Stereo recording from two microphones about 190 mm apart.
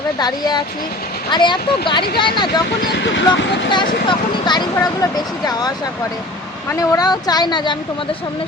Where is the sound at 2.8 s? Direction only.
60° left (ahead or behind).